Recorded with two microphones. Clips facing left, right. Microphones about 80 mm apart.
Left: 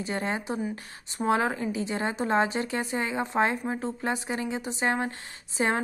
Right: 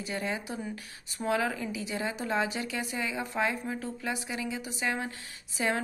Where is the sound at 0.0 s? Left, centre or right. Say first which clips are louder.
Left 4 dB; left.